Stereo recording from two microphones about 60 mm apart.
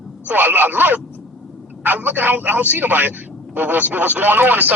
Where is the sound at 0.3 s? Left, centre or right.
Right.